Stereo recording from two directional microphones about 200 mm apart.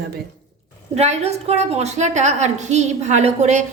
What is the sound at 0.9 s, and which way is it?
A woman's voice, 30° right (ahead or behind).